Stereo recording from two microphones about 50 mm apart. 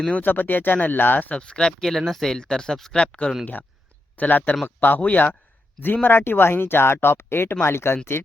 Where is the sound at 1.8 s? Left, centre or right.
Centre.